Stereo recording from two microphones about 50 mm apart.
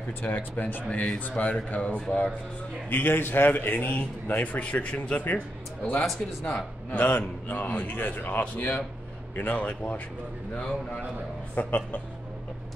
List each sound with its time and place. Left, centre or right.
0.2 s a man's voice: left
0.8 s speech: left
2.9 s a man's voice: left
6.4 s a man's voice: left
11.5 s a man's voice: left